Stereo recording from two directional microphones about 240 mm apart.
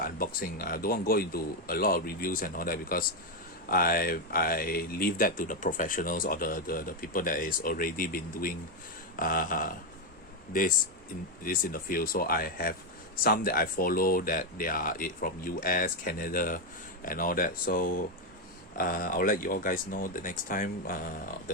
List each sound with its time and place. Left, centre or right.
0.0 s speech: left
11.4 s speech: left